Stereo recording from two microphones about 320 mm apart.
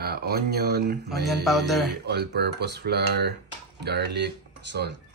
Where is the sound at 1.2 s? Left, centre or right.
Centre.